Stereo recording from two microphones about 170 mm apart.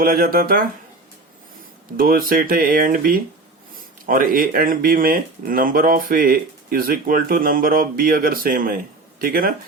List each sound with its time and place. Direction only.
0.0 s speech: 55° right (ahead or behind)
2.0 s speech: 55° right (ahead or behind)